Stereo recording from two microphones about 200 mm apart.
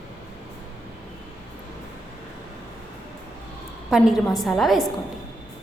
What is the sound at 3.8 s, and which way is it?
A woman's voice, centre (ahead or behind).